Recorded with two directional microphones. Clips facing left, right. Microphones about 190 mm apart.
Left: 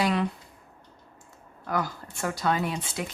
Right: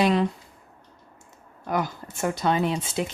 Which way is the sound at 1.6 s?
20° right (ahead or behind).